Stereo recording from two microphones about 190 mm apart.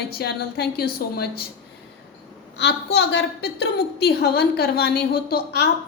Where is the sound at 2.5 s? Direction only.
65° left (ahead or behind).